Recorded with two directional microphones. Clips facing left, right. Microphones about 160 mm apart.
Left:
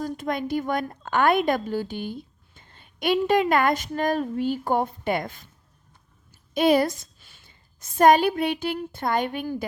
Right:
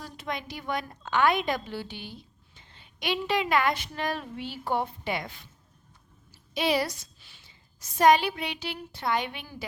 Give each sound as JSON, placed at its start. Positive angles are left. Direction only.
{"t": 0.0, "sound": "a woman's voice", "side_deg": 45}
{"t": 6.5, "sound": "a woman's voice", "side_deg": 50}